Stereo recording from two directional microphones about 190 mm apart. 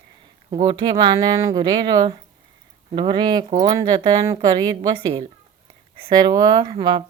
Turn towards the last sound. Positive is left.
turn(degrees=-25)  # may be behind; listen again after turning